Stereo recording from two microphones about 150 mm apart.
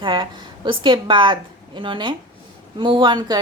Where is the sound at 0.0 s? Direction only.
35° right (ahead or behind).